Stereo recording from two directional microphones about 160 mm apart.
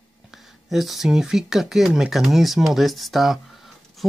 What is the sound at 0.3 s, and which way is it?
Speech, centre (ahead or behind).